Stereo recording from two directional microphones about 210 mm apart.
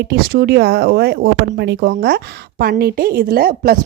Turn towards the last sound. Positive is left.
turn(degrees=-45)  # may be behind; listen again after turning